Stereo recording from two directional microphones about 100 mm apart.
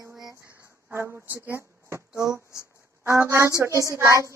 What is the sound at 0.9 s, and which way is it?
A child's voice, 20° right (ahead or behind).